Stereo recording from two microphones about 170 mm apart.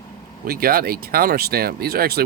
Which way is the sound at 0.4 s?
60° right (ahead or behind).